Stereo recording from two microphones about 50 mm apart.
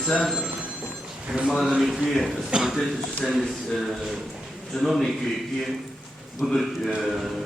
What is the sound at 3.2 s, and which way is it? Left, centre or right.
Speech, left.